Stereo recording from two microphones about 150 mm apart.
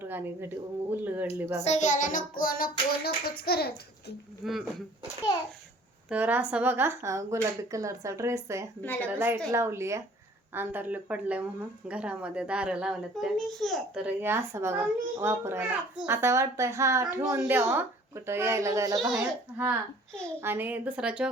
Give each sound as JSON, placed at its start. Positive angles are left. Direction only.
{"t": 0.0, "sound": "a child's voice", "side_deg": -15}
{"t": 1.6, "sound": "child singing", "side_deg": 50}
{"t": 4.4, "sound": "a child's voice", "side_deg": 0}
{"t": 6.1, "sound": "speech", "side_deg": -10}
{"t": 8.8, "sound": "a woman's voice", "side_deg": 10}
{"t": 9.1, "sound": "a child's voice", "side_deg": -15}
{"t": 18.9, "sound": "a child's voice", "side_deg": 0}
{"t": 19.5, "sound": "a child's voice", "side_deg": -10}